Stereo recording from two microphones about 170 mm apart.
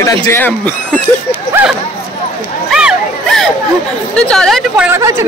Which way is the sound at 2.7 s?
Centre (ahead or behind).